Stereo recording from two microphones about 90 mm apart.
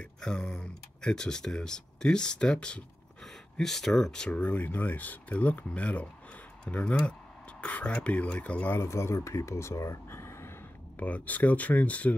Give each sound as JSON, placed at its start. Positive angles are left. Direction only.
{"t": 0.0, "sound": "speech", "side_deg": 10}
{"t": 8.7, "sound": "speech", "side_deg": 30}
{"t": 11.0, "sound": "speech", "side_deg": 15}